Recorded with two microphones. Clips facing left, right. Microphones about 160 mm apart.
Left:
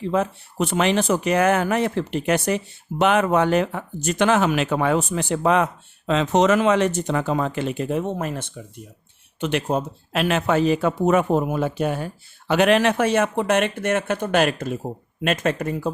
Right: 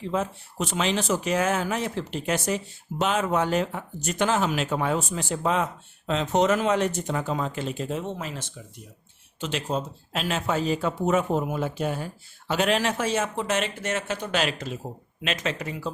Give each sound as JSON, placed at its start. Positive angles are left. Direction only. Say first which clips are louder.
{"t": 0.1, "sound": "speech", "louder": "left 5 dB", "side_deg": 60}
{"t": 6.1, "sound": "speech", "louder": "left 4 dB", "side_deg": 90}